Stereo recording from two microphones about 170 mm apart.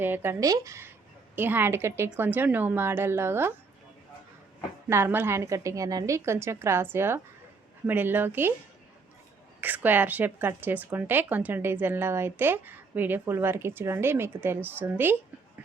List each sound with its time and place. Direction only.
0.0 s speech: 15° right (ahead or behind)
4.9 s speech: 15° right (ahead or behind)
9.6 s speech: 10° right (ahead or behind)